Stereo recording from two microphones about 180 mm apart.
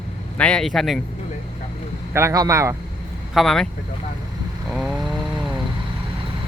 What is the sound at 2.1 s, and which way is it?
Speech, 15° right (ahead or behind).